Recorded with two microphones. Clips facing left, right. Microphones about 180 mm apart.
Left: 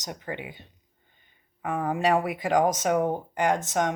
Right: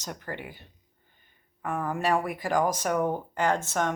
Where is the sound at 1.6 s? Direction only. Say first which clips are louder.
Left 3 dB; 20° left (ahead or behind).